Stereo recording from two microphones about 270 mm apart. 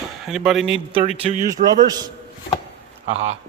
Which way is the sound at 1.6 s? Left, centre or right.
Right.